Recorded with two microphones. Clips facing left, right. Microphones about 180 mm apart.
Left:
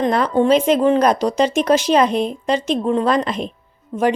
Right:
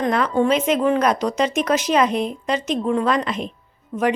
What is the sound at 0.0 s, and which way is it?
Speech, 30° left (ahead or behind).